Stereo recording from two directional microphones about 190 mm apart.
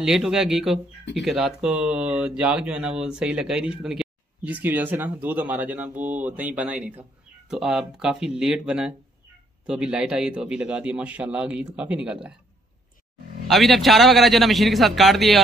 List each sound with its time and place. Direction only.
0.0 s speech: centre (ahead or behind)
13.5 s speech: centre (ahead or behind)